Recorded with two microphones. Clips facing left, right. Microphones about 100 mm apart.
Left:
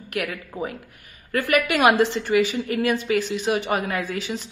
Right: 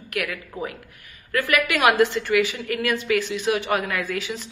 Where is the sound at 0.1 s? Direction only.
35° left (ahead or behind).